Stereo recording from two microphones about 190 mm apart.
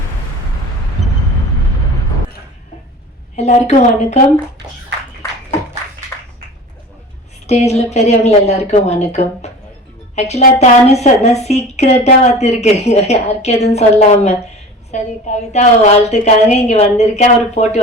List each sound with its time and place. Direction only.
3.3 s a woman's voice: 35° left (ahead or behind)
6.1 s a sound: 15° left (ahead or behind)
7.4 s a woman's voice: 35° left (ahead or behind)